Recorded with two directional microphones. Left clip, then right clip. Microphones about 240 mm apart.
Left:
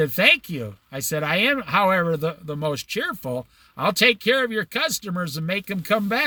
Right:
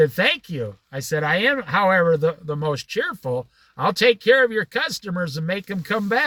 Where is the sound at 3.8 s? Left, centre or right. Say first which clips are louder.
Right 2 dB; centre.